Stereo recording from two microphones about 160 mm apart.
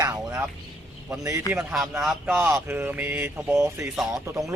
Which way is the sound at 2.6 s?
15° right (ahead or behind).